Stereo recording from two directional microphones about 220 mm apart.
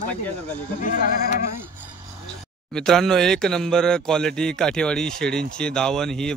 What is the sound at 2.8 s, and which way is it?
Speech, centre (ahead or behind).